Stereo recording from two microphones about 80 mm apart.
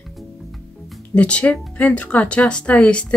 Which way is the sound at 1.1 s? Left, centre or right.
Centre.